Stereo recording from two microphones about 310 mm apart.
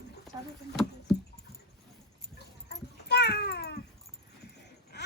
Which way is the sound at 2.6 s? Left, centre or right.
Left.